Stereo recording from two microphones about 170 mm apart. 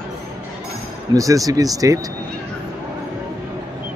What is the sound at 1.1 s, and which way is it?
Speech, 20° right (ahead or behind).